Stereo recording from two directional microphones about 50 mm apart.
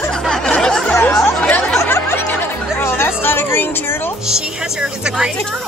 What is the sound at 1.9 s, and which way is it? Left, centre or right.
Music, left.